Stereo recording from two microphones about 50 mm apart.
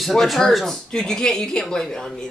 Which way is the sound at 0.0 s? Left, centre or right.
Centre.